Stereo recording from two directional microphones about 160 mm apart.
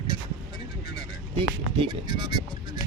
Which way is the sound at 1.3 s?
35° right (ahead or behind).